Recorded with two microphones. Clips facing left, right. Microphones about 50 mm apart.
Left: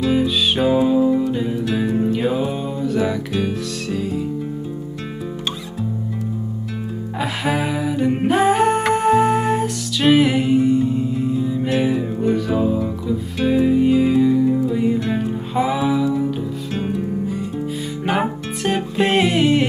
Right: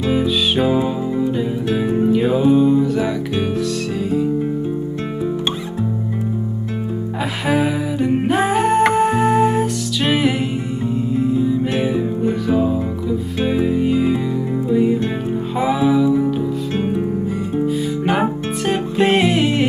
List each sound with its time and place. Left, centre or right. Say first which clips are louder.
0.6 s music: left 2 dB; centre
2.1 s music: right 7 dB; centre
7.4 s music: right 4 dB; centre
14.4 s music: left 2 dB; centre
15.5 s music: right 2 dB; centre
18.7 s music: right 2 dB; centre